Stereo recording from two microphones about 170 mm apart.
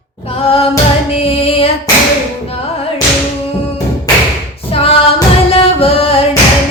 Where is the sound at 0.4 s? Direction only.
35° left (ahead or behind).